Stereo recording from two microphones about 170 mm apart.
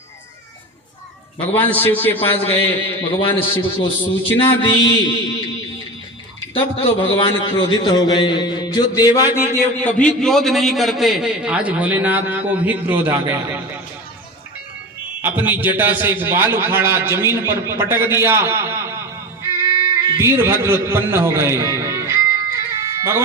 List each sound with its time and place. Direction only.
1.5 s a man's voice: 10° left (ahead or behind)
3.2 s a man's voice: 30° left (ahead or behind)
7.0 s a man's voice: 30° left (ahead or behind); by 13.6 s 10° right (ahead or behind)
15.2 s a man's voice: 10° right (ahead or behind)
19.6 s a sound: 15° right (ahead or behind)